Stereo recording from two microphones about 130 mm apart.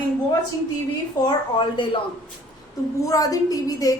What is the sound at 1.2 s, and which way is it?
Speech, 40° left (ahead or behind).